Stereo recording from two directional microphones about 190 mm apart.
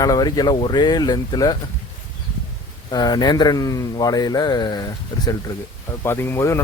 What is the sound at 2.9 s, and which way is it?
Speech, 20° left (ahead or behind).